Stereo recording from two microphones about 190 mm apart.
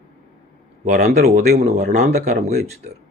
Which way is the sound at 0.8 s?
40° right (ahead or behind).